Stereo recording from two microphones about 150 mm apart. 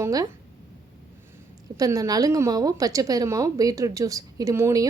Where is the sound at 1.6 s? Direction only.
25° right (ahead or behind).